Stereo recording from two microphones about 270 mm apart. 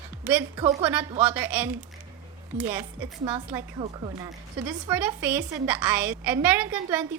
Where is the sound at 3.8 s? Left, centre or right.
Centre.